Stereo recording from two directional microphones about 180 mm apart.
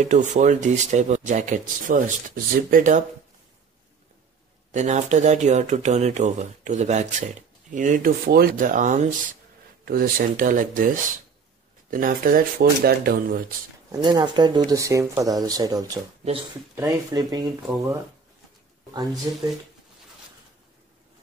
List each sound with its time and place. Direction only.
0.0 s speech: 40° right (ahead or behind)
4.7 s speech: 40° right (ahead or behind)
9.8 s speech: 55° right (ahead or behind)
13.9 s speech: 25° right (ahead or behind)